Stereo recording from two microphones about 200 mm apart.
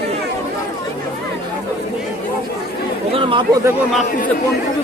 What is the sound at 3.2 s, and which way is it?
Speech, 25° right (ahead or behind).